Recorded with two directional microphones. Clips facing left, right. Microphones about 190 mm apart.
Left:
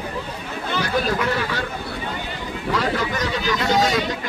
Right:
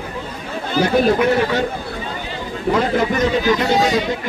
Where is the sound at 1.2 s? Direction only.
20° right (ahead or behind).